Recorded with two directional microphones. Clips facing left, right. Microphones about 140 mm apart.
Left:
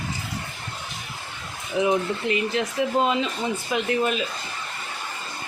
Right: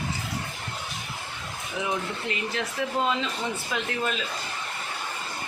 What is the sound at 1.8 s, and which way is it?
Speech, 20° left (ahead or behind).